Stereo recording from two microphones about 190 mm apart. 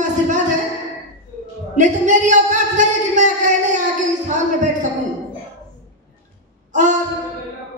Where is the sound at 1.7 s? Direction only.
40° right (ahead or behind).